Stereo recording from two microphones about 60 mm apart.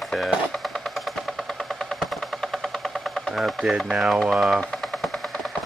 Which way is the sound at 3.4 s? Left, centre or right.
Centre.